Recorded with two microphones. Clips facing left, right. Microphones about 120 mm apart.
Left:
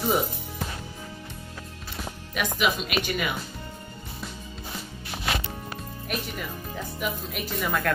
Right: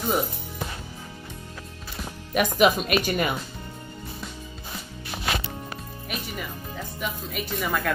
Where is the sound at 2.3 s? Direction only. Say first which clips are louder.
Right 6 dB; 45° right (ahead or behind).